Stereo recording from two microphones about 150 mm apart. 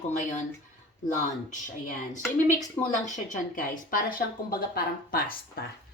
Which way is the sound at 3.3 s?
65° left (ahead or behind).